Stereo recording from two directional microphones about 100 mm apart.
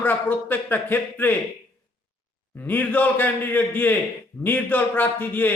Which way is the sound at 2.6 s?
20° left (ahead or behind).